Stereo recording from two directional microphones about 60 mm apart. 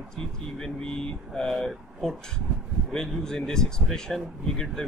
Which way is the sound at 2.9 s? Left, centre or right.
Centre.